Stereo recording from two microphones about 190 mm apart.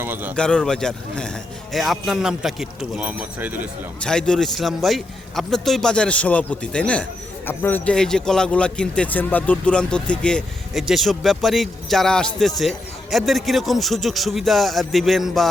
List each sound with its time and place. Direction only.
0.0 s speech: 10° right (ahead or behind)
0.3 s speech: 5° left (ahead or behind)
4.0 s speech: 5° left (ahead or behind)